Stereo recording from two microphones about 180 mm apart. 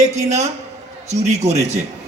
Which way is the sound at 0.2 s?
40° right (ahead or behind).